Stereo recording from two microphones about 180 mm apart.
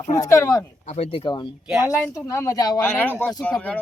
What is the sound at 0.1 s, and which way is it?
Speech, 15° left (ahead or behind).